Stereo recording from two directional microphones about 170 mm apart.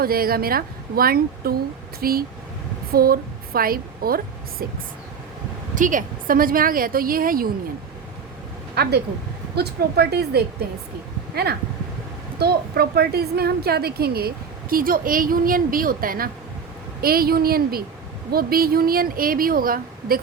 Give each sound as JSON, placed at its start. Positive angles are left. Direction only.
{"t": 0.0, "sound": "a woman's voice", "side_deg": -60}
{"t": 5.7, "sound": "a woman's voice", "side_deg": -50}
{"t": 8.7, "sound": "a woman's voice", "side_deg": -70}
{"t": 12.4, "sound": "a woman's voice", "side_deg": -70}